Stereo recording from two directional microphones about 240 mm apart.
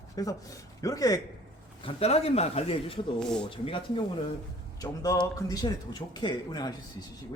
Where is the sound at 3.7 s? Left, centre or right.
Left.